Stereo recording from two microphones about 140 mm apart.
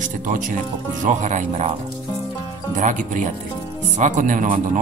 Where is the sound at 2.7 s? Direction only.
65° right (ahead or behind).